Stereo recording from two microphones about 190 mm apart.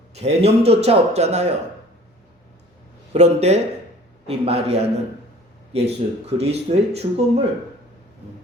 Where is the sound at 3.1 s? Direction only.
35° right (ahead or behind).